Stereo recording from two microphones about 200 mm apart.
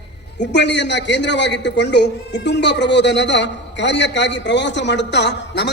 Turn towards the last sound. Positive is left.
turn(degrees=60)  # may be behind; listen again after turning